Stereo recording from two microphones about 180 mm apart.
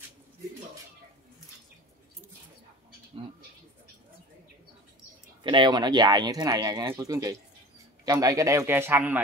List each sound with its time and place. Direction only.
5.4 s a man's voice: 25° right (ahead or behind); by 9.2 s 10° right (ahead or behind)